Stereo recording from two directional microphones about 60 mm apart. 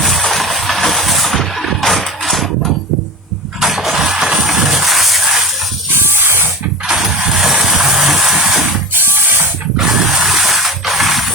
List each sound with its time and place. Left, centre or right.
0.0 s a sound: centre
3.6 s music: centre
6.1 s spray: right
6.8 s vehicle: centre
8.9 s music: right
9.7 s a sound: centre